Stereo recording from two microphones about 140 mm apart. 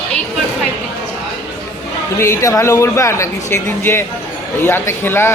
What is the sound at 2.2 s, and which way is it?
Speech, 20° left (ahead or behind).